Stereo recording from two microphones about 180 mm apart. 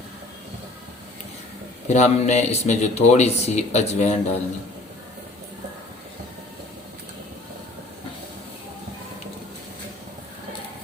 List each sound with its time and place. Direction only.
1.9 s speech: 40° left (ahead or behind)